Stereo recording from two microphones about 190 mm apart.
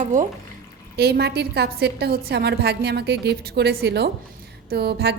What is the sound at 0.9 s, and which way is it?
A woman's voice, 60° right (ahead or behind).